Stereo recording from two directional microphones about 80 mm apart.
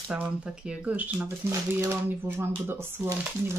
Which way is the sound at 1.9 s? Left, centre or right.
Right.